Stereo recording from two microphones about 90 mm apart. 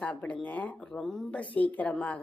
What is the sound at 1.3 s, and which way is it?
Speech, 15° left (ahead or behind).